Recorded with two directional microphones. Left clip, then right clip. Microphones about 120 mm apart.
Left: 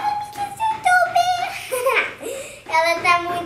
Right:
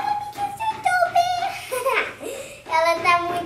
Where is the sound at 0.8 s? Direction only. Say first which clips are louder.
Left 2 dB; 5° left (ahead or behind).